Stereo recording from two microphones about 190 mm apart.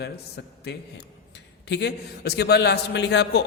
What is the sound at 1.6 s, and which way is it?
A man's voice, 65° left (ahead or behind).